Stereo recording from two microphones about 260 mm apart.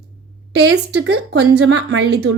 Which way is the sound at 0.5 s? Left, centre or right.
Right.